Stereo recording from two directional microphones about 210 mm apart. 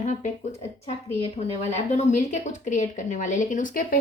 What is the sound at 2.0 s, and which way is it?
A woman's voice, 35° left (ahead or behind).